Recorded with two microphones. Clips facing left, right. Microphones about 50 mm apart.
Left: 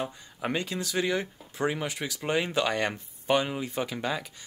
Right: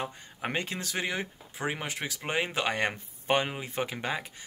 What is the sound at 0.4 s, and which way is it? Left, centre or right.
Speech, right.